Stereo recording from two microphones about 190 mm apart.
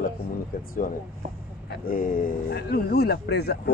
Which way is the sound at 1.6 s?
50° left (ahead or behind).